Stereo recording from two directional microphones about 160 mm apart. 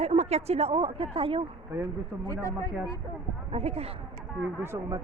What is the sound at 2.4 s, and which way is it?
Speech, 20° left (ahead or behind).